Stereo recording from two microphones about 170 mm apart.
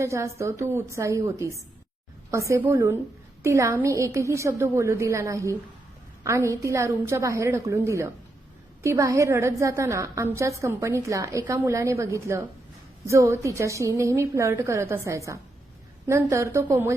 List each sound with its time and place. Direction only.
0.0 s a woman's voice: 15° right (ahead or behind)